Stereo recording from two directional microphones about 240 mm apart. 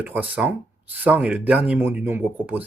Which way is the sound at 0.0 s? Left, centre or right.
Centre.